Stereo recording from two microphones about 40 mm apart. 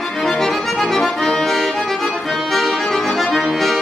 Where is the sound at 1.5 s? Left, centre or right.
Centre.